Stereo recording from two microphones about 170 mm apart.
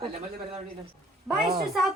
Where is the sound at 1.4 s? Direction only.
65° right (ahead or behind).